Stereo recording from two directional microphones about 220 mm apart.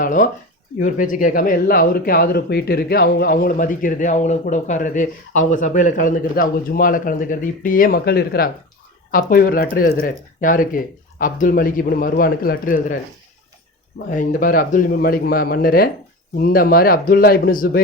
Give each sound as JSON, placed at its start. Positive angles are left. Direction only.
{"t": 0.0, "sound": "speech", "side_deg": 35}
{"t": 14.1, "sound": "speech", "side_deg": 40}